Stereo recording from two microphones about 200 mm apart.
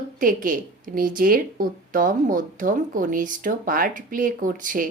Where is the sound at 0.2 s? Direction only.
40° right (ahead or behind).